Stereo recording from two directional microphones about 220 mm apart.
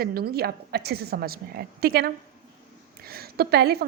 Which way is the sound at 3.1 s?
45° right (ahead or behind).